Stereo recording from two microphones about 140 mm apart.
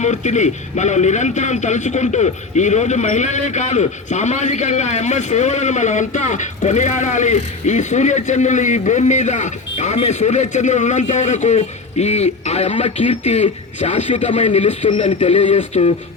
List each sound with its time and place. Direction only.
0.0 s a man's voice: 55° left (ahead or behind)